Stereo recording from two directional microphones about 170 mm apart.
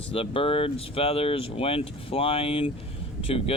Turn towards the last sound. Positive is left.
turn(degrees=35)  # may be behind; listen again after turning